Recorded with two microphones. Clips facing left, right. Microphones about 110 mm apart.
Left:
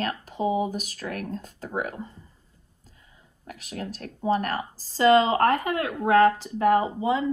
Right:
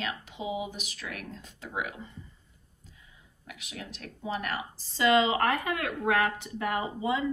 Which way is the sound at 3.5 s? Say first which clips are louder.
Left 8 dB; 40° left (ahead or behind).